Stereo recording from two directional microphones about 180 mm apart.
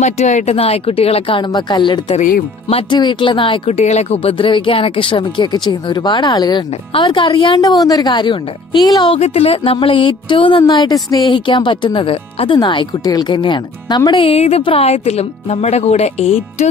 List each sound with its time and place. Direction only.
0.0 s speech: 40° left (ahead or behind); by 2.1 s 25° left (ahead or behind)
2.1 s speech: 50° left (ahead or behind)
2.7 s speech: 25° left (ahead or behind)